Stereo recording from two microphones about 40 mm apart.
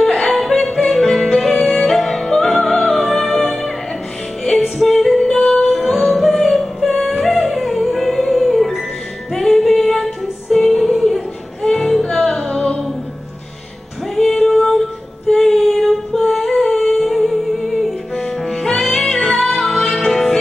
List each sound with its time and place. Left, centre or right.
0.1 s music: centre
0.4 s music: centre
4.7 s music: centre
5.9 s music: centre
12.4 s music: left
14.1 s female singing: centre
15.2 s music: centre
16.2 s a sound: centre
16.7 s music: centre